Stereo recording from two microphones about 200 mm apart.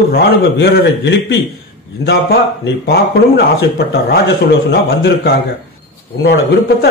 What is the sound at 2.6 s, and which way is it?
A man's voice, 55° left (ahead or behind).